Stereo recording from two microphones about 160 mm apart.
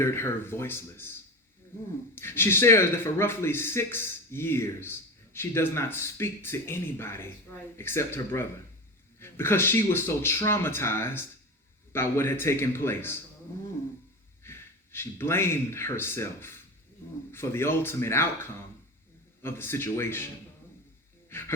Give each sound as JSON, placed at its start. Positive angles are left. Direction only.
{"t": 0.0, "sound": "speech", "side_deg": 15}
{"t": 2.1, "sound": "speech", "side_deg": 15}
{"t": 14.4, "sound": "speech", "side_deg": 15}
{"t": 19.4, "sound": "speech", "side_deg": 15}
{"t": 21.2, "sound": "music", "side_deg": 15}